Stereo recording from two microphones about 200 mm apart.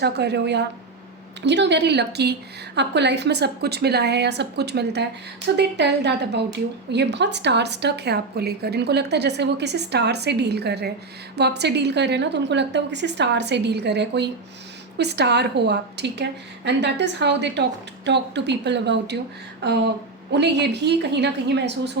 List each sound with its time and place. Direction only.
0.0 s a woman's voice: 55° right (ahead or behind)